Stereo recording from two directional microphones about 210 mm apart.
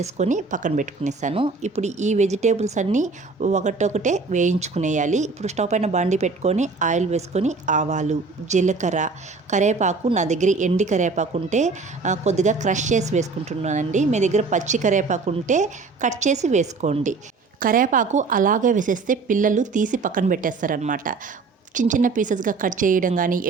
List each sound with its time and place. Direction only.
0.0 s a woman's voice: 35° right (ahead or behind)